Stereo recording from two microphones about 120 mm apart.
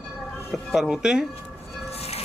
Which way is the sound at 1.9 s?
60° left (ahead or behind).